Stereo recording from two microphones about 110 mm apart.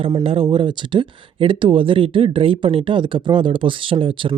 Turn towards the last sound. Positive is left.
turn(degrees=-50)  # may be behind; listen again after turning